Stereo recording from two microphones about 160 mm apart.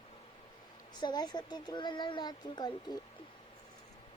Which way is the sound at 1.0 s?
25° left (ahead or behind).